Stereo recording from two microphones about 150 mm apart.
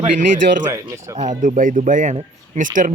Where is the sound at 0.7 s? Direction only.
20° right (ahead or behind).